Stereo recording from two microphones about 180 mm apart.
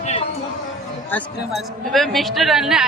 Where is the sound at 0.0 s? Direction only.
35° left (ahead or behind).